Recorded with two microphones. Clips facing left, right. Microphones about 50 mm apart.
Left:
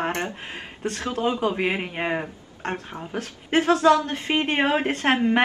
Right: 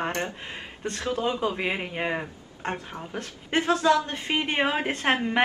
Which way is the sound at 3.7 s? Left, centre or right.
Left.